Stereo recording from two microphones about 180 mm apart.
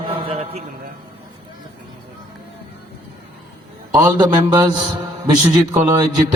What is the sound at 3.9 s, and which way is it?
A man's voice, 20° right (ahead or behind).